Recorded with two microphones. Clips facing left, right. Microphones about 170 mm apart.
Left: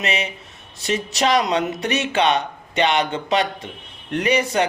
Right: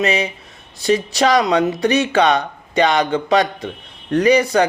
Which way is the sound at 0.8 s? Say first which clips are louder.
Right 6 dB; 35° right (ahead or behind).